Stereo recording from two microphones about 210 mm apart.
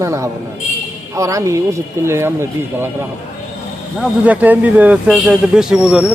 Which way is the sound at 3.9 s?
5° right (ahead or behind).